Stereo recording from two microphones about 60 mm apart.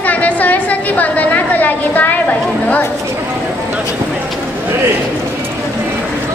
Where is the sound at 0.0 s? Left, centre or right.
Left.